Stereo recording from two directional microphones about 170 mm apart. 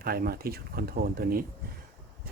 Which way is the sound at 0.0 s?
65° right (ahead or behind).